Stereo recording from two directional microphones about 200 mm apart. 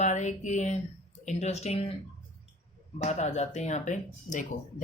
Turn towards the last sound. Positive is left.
turn(degrees=40)  # may be behind; listen again after turning